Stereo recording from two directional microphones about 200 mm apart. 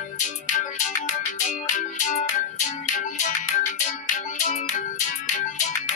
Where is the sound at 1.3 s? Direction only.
40° left (ahead or behind).